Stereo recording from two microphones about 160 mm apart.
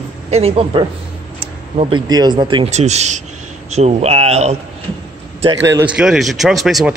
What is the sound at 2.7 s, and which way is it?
Speech, 45° right (ahead or behind).